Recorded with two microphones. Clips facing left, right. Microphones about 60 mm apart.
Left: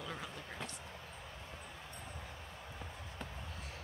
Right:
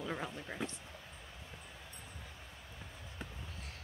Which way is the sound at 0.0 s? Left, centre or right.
Right.